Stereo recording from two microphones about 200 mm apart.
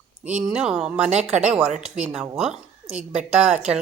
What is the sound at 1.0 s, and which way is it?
Speech, 35° right (ahead or behind).